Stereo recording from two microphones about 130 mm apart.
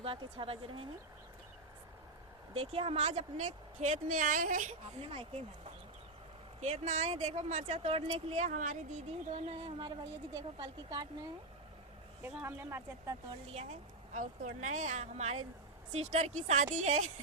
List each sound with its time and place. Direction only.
0.0 s a woman's voice: 45° right (ahead or behind)
2.5 s a woman's voice: 45° right (ahead or behind); by 4.7 s 85° right
6.6 s a woman's voice: 65° right (ahead or behind)
8.4 s speech: 80° right
9.0 s a woman's voice: 50° right (ahead or behind)
9.7 s a woman's voice: 35° right (ahead or behind)
12.3 s speech: 15° right (ahead or behind)
13.5 s a woman's voice: 55° right (ahead or behind)